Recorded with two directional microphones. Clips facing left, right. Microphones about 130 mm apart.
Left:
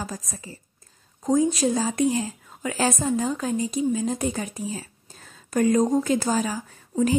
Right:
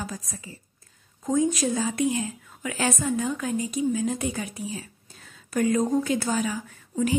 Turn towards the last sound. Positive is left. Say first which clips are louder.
# left 3 dB
turn(degrees=40)  # may be behind; listen again after turning